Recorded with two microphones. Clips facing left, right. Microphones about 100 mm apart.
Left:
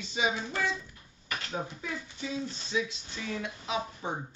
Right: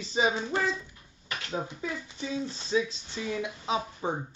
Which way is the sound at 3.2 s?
15° right (ahead or behind).